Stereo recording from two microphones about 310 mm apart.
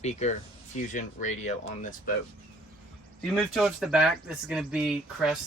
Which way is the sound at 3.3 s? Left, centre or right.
Centre.